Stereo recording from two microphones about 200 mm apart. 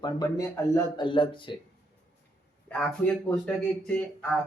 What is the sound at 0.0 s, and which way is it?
Speech, 20° left (ahead or behind).